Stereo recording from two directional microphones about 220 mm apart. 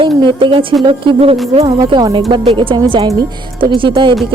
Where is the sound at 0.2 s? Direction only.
20° right (ahead or behind).